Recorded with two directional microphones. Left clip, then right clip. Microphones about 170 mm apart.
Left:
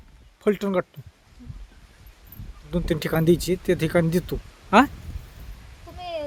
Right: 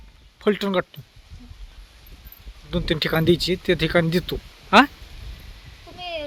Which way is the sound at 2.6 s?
5° left (ahead or behind).